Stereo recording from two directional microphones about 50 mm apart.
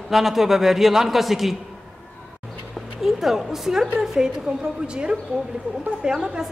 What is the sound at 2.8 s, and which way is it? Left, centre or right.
A man's voice, centre.